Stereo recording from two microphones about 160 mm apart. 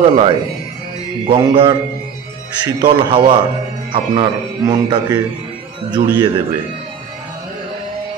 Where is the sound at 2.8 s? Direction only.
30° right (ahead or behind).